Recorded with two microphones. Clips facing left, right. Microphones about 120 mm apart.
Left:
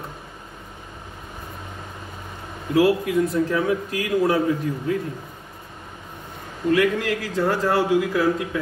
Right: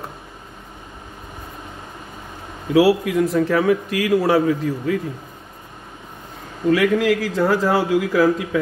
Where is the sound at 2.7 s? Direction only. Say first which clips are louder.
Right 3 dB; 90° right.